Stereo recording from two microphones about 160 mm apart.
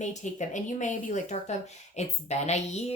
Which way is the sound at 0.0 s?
50° left (ahead or behind).